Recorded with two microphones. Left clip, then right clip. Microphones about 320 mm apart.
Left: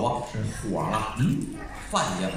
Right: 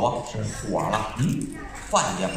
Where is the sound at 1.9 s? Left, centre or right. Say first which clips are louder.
Right 4 dB; centre.